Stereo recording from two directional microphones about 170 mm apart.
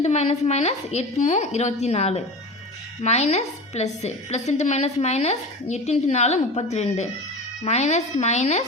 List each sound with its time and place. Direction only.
0.0 s a woman's voice: 40° left (ahead or behind)